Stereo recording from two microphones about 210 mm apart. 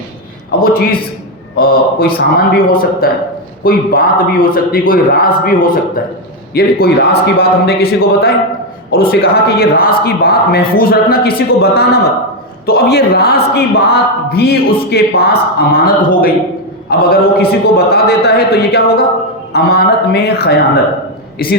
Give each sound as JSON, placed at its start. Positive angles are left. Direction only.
{"t": 0.6, "sound": "speech", "side_deg": 45}